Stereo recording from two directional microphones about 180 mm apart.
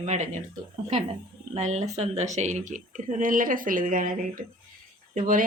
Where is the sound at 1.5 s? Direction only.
40° right (ahead or behind).